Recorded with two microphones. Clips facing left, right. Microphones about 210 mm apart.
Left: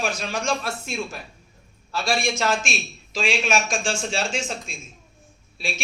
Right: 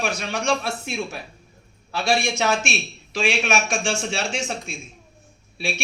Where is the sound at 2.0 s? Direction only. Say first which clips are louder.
Right 2 dB; 65° right (ahead or behind).